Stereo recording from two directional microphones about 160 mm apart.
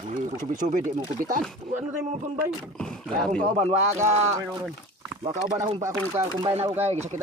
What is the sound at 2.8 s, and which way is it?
Speech, 5° left (ahead or behind).